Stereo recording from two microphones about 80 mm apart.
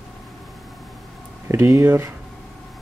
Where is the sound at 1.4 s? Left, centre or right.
Right.